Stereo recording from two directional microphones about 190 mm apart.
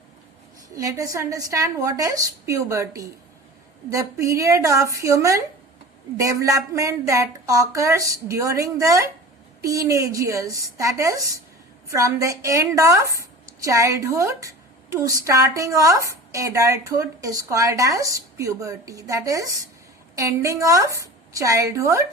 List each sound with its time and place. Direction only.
0.8 s a woman's voice: 15° right (ahead or behind)